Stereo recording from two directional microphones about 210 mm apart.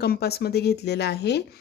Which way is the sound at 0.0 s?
50° left (ahead or behind).